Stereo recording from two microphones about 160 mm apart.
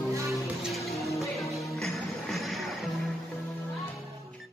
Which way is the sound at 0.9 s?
20° left (ahead or behind).